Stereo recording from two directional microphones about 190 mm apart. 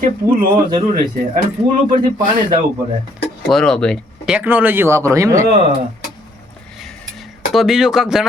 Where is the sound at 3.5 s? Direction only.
5° left (ahead or behind).